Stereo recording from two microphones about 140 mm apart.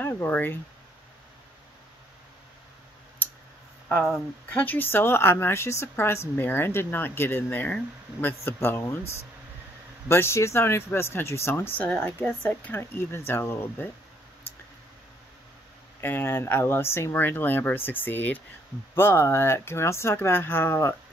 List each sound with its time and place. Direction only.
0.0 s speech: 15° left (ahead or behind)
3.9 s speech: 5° left (ahead or behind)
10.0 s speech: 20° left (ahead or behind)
16.0 s speech: 15° left (ahead or behind)